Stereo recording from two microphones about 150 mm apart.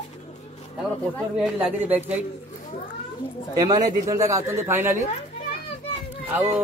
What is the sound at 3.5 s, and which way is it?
Speech, 25° right (ahead or behind).